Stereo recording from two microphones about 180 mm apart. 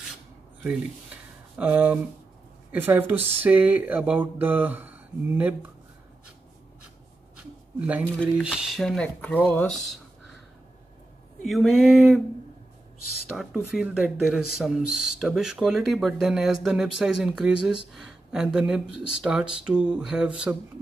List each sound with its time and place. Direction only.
1.6 s speech: 10° right (ahead or behind)
7.8 s speech: 10° right (ahead or behind)
11.4 s speech: centre (ahead or behind)
13.3 s speech: centre (ahead or behind)